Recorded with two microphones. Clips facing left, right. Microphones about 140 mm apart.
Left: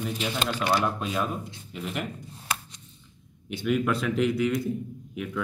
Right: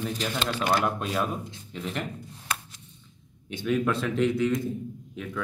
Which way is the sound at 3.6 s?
10° left (ahead or behind).